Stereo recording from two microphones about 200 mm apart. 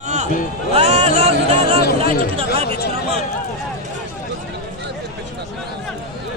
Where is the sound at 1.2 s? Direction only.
30° right (ahead or behind).